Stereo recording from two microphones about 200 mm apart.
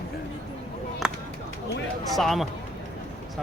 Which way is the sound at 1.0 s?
5° right (ahead or behind).